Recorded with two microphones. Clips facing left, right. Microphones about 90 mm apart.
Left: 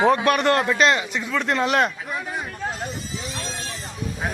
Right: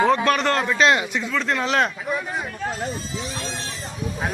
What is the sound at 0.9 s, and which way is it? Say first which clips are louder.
Speech: right 2 dB; 5° right (ahead or behind).